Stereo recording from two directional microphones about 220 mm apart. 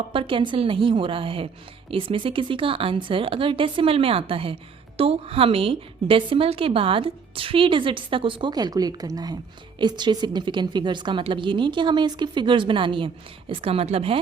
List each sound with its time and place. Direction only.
0.1 s a woman's voice: 25° right (ahead or behind)